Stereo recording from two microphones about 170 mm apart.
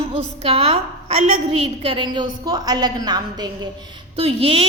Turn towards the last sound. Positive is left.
turn(degrees=-35)  # may be behind; listen again after turning